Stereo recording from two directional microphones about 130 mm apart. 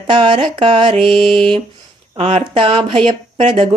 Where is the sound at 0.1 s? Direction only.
40° right (ahead or behind).